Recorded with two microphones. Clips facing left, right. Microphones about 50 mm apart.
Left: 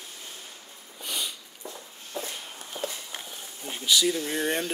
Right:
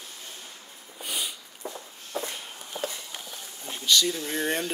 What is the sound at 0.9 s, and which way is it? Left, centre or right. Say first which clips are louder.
Sniff: even; centre.